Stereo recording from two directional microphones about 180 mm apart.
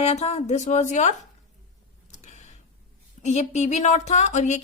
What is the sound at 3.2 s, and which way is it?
A woman's voice, 40° left (ahead or behind).